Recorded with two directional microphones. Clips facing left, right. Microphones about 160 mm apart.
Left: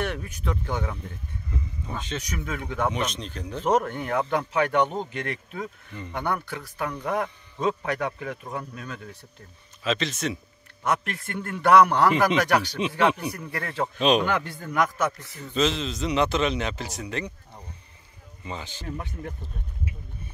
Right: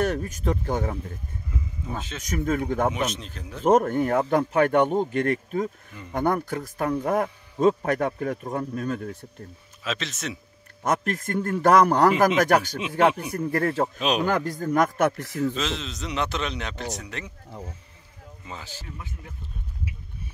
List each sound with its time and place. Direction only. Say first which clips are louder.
0.0 s speech: right 5 dB; 40° right (ahead or behind)
1.5 s speech: right 1 dB; 5° right (ahead or behind)
2.2 s speech: right 7 dB; 45° right (ahead or behind)
2.9 s a man's voice: right 1 dB; 5° right (ahead or behind)
3.6 s speech: right 5 dB; 45° right (ahead or behind)
9.8 s a man's voice: left 4 dB; centre (ahead or behind)
10.8 s speech: right 2 dB; 45° right (ahead or behind)
13.9 s a man's voice: left 4 dB; 5° right (ahead or behind)
14.2 s a man's voice: right 3 dB; 40° right (ahead or behind)
15.0 s a man's voice: right 5 dB; 65° right (ahead or behind); by 15.5 s 90° right
15.5 s a man's voice: left 5 dB; centre (ahead or behind)
18.4 s a man's voice: left 4 dB; centre (ahead or behind)